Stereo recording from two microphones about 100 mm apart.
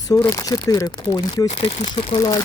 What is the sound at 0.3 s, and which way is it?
Speech, 40° left (ahead or behind).